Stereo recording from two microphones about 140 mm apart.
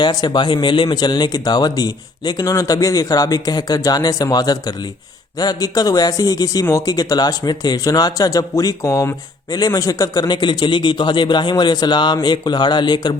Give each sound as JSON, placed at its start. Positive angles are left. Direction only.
{"t": 0.0, "sound": "a man's voice", "side_deg": 30}